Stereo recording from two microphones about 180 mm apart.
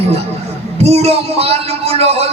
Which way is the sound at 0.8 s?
35° right (ahead or behind).